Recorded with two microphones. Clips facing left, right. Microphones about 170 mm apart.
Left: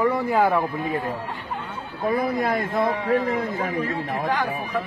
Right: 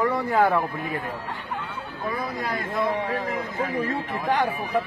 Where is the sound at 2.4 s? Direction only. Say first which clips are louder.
Left 4 dB; 60° left (ahead or behind).